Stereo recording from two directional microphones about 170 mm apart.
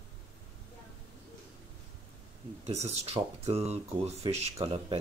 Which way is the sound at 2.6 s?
40° right (ahead or behind).